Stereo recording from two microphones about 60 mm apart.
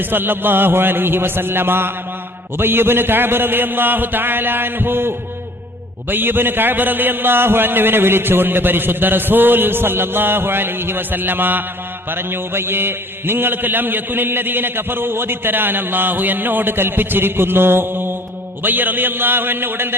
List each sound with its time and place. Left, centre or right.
0.0 s a man's voice: right